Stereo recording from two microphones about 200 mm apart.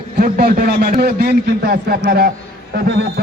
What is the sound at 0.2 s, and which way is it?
A man's voice, 50° right (ahead or behind).